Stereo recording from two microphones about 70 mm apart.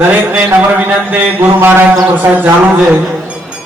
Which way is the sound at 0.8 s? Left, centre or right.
Right.